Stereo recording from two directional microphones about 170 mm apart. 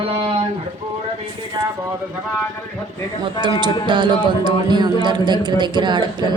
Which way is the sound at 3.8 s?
30° right (ahead or behind).